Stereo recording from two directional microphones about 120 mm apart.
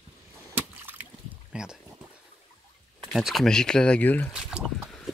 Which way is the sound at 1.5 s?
5° right (ahead or behind).